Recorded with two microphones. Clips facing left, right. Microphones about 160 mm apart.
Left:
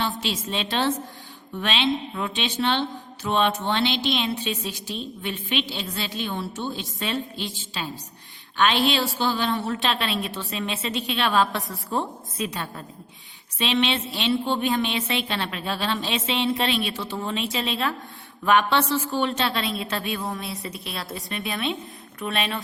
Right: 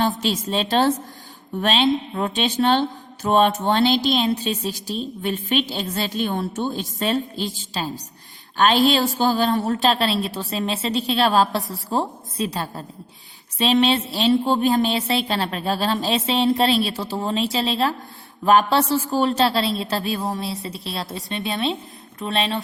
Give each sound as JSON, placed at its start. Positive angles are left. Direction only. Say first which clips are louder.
{"t": 0.2, "sound": "a woman's voice", "louder": "right 5 dB", "side_deg": -40}